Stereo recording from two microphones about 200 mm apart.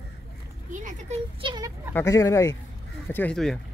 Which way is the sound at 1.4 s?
20° right (ahead or behind).